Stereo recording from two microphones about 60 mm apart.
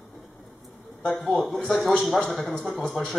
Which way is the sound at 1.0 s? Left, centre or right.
Centre.